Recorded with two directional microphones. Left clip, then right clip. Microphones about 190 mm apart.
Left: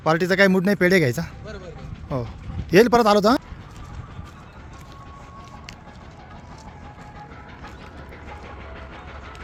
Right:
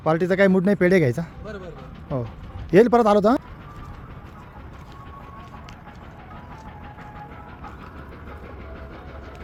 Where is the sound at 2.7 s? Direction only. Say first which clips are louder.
Even; centre (ahead or behind).